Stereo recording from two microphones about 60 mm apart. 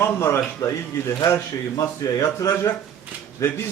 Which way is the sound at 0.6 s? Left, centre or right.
Left.